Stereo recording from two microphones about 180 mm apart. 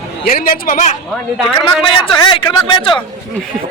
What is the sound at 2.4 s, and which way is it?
Speech, 25° left (ahead or behind).